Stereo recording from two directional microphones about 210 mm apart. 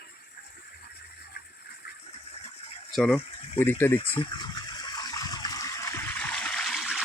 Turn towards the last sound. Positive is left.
turn(degrees=0)  # may be behind; listen again after turning